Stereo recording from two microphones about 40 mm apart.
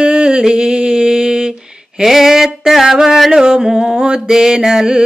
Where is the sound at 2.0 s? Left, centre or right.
Centre.